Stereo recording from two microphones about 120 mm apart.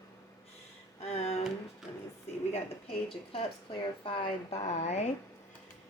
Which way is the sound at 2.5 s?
50° left (ahead or behind).